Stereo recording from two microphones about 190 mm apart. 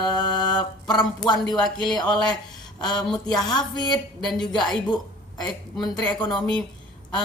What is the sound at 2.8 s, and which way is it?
Speech, 20° left (ahead or behind).